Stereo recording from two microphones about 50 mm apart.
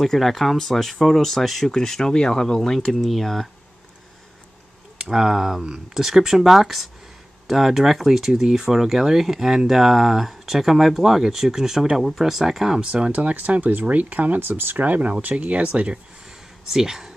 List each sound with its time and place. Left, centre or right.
0.0 s speech: centre
5.1 s speech: centre
13.1 s speech: right
16.7 s speech: centre